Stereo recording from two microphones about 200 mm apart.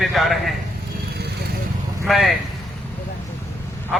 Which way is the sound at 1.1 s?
55° right (ahead or behind).